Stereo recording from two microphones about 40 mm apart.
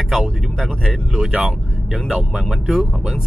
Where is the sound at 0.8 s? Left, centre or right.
Centre.